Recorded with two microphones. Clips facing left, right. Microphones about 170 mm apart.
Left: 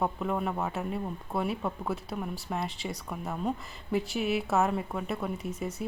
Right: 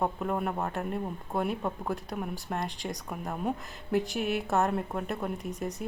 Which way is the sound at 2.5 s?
Centre (ahead or behind).